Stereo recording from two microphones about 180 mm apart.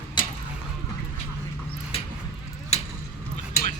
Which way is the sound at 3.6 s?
60° left (ahead or behind).